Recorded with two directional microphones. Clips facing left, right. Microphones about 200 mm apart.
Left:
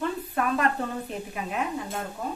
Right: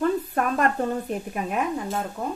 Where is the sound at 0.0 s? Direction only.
45° right (ahead or behind).